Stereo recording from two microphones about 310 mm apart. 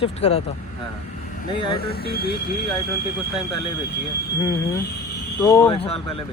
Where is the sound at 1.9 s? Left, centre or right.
Left.